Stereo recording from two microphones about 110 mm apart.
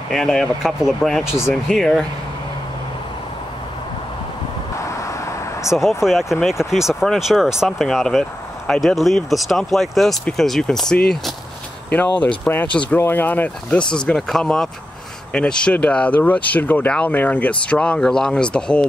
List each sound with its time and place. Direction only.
0.1 s speech: 5° left (ahead or behind)
5.0 s vehicle: 25° left (ahead or behind)
5.7 s speech: 5° right (ahead or behind)